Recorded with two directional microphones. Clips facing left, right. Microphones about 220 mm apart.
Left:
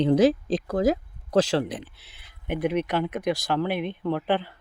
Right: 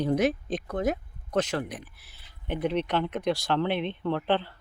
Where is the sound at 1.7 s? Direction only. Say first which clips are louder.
Left 5 dB; 25° left (ahead or behind).